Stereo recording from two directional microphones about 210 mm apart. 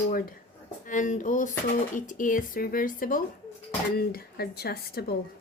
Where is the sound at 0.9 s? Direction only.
35° left (ahead or behind).